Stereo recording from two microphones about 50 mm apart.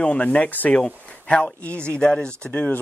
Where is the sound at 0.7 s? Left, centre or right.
Left.